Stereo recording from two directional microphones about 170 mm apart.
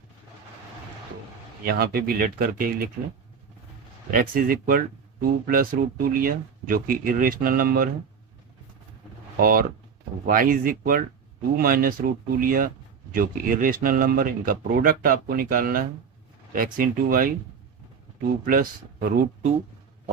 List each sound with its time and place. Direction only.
1.6 s speech: 60° right (ahead or behind)
4.1 s speech: 55° right (ahead or behind)
9.4 s speech: 60° right (ahead or behind)
18.4 s speech: 55° right (ahead or behind)